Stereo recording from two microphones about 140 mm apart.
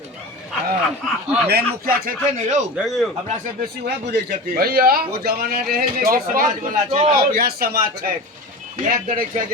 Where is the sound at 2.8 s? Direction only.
Centre (ahead or behind).